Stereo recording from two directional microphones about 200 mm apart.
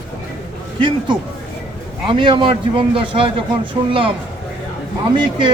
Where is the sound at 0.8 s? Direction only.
25° right (ahead or behind).